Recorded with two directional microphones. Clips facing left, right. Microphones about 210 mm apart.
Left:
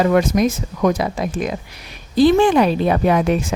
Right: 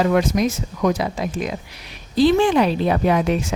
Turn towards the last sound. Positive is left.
turn(degrees=50)  # may be behind; listen again after turning